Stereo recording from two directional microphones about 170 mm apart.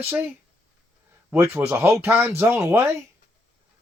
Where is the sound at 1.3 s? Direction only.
15° right (ahead or behind).